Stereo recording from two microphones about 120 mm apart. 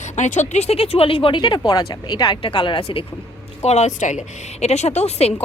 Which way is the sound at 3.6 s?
65° left (ahead or behind).